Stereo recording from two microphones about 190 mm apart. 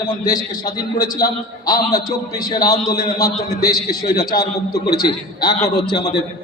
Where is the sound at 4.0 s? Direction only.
55° left (ahead or behind).